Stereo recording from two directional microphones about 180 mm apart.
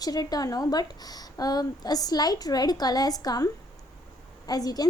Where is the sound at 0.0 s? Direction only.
20° left (ahead or behind).